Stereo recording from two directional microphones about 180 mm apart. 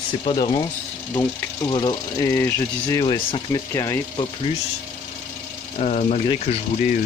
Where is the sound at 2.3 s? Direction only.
15° left (ahead or behind).